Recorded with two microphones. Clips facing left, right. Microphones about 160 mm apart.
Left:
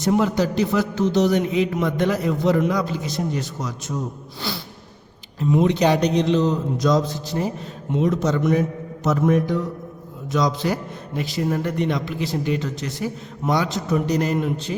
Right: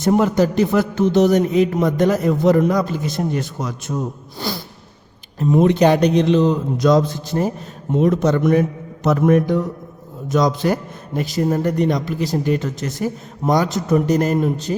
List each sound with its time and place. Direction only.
0.0 s a man's voice: 50° right (ahead or behind)